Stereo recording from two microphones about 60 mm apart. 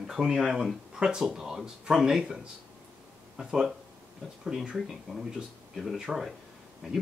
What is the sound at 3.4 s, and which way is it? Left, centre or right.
Speech, centre.